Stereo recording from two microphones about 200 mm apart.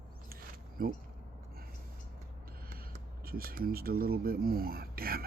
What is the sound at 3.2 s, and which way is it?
Speech, 50° right (ahead or behind).